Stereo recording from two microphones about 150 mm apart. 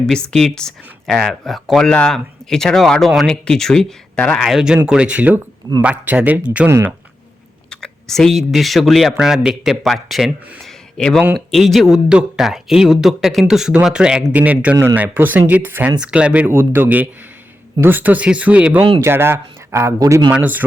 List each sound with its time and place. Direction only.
0.0 s speech: 5° left (ahead or behind)
7.7 s speech: 5° left (ahead or behind); by 20.3 s 20° right (ahead or behind)
20.3 s speech: 10° right (ahead or behind)